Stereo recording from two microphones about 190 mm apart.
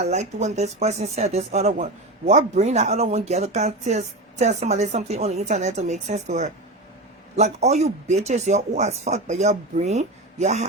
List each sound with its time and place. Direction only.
0.0 s speech: 35° right (ahead or behind)